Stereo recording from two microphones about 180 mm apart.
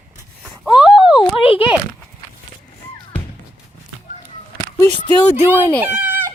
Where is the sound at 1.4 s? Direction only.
30° left (ahead or behind).